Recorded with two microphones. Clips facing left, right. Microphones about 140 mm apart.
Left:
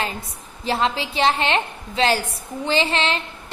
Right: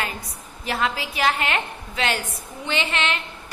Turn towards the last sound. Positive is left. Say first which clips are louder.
# left 4 dB
turn(degrees=30)  # may be behind; listen again after turning